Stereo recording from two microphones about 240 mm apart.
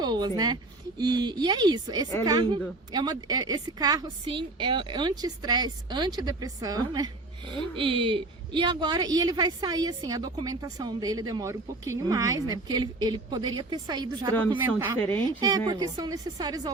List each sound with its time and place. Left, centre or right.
0.0 s a woman's voice: centre